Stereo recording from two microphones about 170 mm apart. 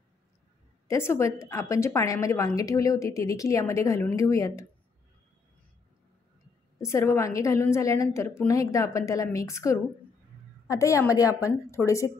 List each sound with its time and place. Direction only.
0.8 s a woman's voice: 15° left (ahead or behind)
6.8 s a woman's voice: 15° left (ahead or behind)